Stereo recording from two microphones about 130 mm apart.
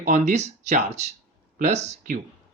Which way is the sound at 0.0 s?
70° right (ahead or behind).